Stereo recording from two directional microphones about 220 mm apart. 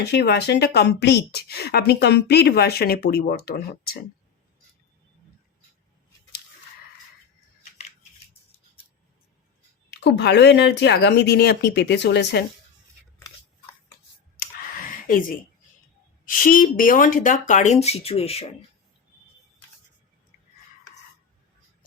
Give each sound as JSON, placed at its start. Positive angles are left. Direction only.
{"t": 0.0, "sound": "speech", "side_deg": 50}
{"t": 9.9, "sound": "speech", "side_deg": 50}
{"t": 14.3, "sound": "clicking", "side_deg": 40}
{"t": 16.2, "sound": "speech", "side_deg": 40}